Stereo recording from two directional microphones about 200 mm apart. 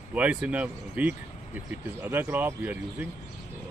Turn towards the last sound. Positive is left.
turn(degrees=-10)  # may be behind; listen again after turning